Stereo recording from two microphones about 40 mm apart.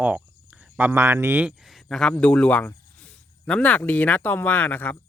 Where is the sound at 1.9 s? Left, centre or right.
Centre.